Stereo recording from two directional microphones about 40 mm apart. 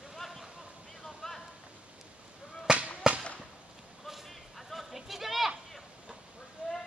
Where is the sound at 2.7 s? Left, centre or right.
Centre.